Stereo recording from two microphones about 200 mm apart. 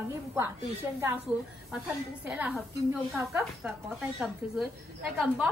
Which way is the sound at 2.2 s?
5° right (ahead or behind).